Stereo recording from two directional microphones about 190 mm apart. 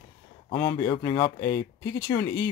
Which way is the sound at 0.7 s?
30° left (ahead or behind).